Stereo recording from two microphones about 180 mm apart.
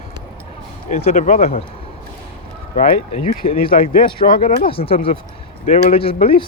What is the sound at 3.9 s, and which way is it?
Speech, 55° left (ahead or behind).